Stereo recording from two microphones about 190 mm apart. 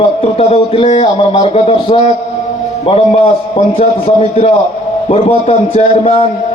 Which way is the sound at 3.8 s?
30° left (ahead or behind).